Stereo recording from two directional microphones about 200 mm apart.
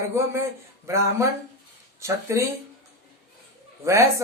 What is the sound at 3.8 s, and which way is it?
Speech, 15° right (ahead or behind).